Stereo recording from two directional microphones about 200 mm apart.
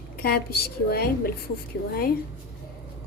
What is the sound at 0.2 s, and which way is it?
A woman's voice, 50° left (ahead or behind).